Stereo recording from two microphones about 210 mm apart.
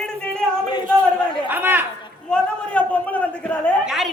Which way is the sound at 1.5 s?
10° right (ahead or behind).